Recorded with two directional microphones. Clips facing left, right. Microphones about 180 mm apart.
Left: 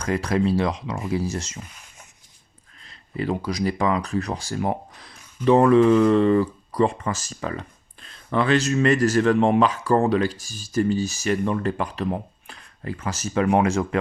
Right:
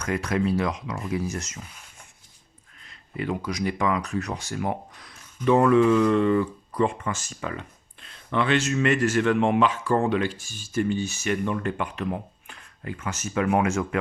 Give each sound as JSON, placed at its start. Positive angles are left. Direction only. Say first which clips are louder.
{"t": 0.0, "sound": "speech", "louder": "left 3 dB", "side_deg": 35}
{"t": 2.8, "sound": "speech", "louder": "left 3 dB", "side_deg": 35}